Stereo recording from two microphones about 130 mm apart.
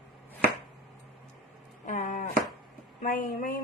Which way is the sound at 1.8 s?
75° left (ahead or behind).